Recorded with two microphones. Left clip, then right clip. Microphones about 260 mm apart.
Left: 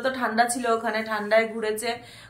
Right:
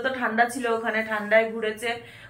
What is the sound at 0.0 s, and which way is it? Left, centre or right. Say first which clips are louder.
A woman's voice: even; centre.